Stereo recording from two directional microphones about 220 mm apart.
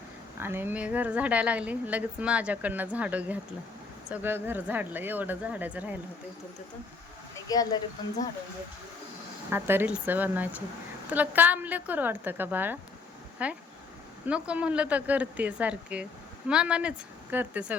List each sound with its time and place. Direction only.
0.3 s a woman's voice: 10° right (ahead or behind)
7.3 s speech: 15° left (ahead or behind)
9.5 s a woman's voice: 10° right (ahead or behind)